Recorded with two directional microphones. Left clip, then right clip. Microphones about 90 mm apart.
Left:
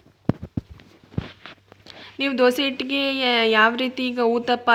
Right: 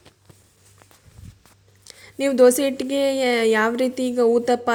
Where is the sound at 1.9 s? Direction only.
55° right (ahead or behind).